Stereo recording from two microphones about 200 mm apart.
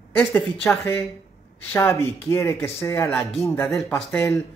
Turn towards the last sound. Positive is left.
turn(degrees=10)  # may be behind; listen again after turning